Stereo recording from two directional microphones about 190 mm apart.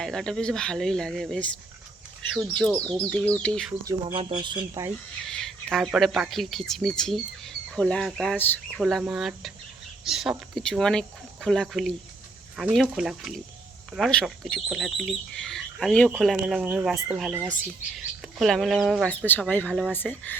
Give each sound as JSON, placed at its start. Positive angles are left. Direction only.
{"t": 0.0, "sound": "speech", "side_deg": 5}
{"t": 2.6, "sound": "speech", "side_deg": 5}
{"t": 4.1, "sound": "speech", "side_deg": -30}
{"t": 5.2, "sound": "speech", "side_deg": 5}